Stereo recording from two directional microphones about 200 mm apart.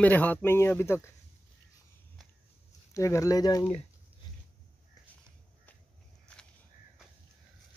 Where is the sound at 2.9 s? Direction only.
15° left (ahead or behind).